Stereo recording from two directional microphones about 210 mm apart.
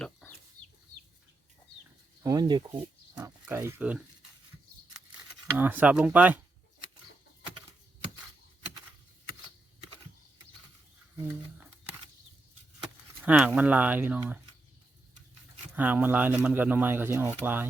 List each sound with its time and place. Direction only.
0.0 s chicken: 5° left (ahead or behind)
2.2 s speech: 20° right (ahead or behind)
5.5 s speech: 10° right (ahead or behind)
11.2 s a sound: 10° right (ahead or behind)
13.2 s speech: 5° right (ahead or behind)
15.7 s speech: 5° right (ahead or behind)